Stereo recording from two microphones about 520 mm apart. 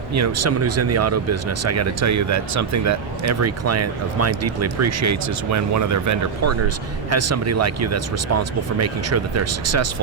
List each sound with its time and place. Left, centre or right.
0.1 s speech: right